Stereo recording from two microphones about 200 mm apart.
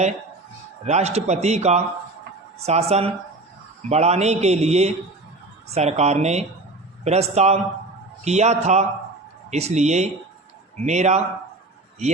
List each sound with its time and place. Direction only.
0.9 s a man's voice: 35° right (ahead or behind)